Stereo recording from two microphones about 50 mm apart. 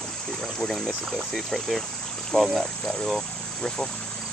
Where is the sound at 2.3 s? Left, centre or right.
Centre.